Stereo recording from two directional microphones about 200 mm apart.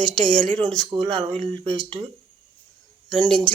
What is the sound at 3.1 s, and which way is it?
Speech, 5° left (ahead or behind).